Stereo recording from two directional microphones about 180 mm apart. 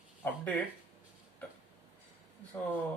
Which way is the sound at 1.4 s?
10° left (ahead or behind).